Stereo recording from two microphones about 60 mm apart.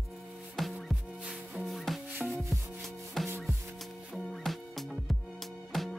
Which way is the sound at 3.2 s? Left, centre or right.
Centre.